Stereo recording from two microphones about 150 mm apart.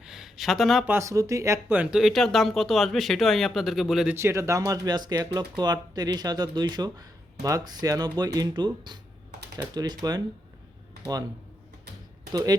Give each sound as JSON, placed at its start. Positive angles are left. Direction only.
{"t": 0.0, "sound": "a sound", "side_deg": 0}
{"t": 0.9, "sound": "speech", "side_deg": -20}
{"t": 4.1, "sound": "speech", "side_deg": -20}
{"t": 12.3, "sound": "speech", "side_deg": -25}